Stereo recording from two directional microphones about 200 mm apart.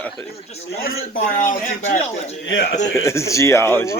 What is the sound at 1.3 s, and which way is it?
Speech, 40° left (ahead or behind).